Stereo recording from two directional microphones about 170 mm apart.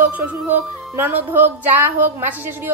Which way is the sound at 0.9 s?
10° right (ahead or behind).